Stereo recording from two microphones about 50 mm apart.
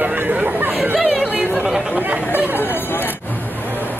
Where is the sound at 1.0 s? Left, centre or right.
Centre.